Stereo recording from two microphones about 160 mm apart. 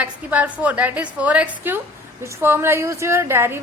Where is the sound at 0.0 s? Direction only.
10° right (ahead or behind).